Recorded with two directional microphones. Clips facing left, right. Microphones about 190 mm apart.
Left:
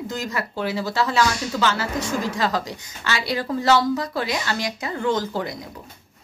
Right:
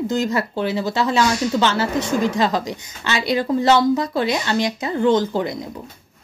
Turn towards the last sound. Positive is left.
turn(degrees=-25)  # may be behind; listen again after turning